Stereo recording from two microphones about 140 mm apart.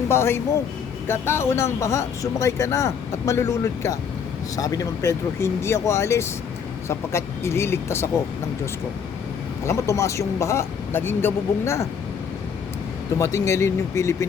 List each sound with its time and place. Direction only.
0.1 s speech: 15° left (ahead or behind)
9.6 s speech: 20° left (ahead or behind)
13.1 s speech: 20° left (ahead or behind)